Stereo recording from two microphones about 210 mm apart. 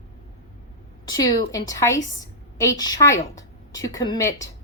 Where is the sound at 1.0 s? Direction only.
20° left (ahead or behind).